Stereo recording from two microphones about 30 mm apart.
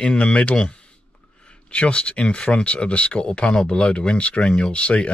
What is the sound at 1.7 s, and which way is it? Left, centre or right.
A man's voice, left.